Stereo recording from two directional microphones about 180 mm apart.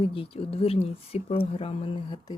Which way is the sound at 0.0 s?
30° left (ahead or behind).